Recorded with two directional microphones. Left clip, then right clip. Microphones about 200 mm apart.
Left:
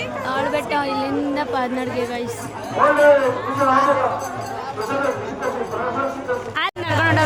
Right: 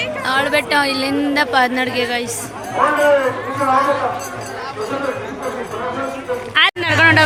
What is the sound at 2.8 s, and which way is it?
Speech, 35° right (ahead or behind).